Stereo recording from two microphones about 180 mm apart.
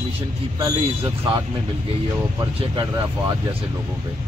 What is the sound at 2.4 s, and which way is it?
Speech, 20° right (ahead or behind).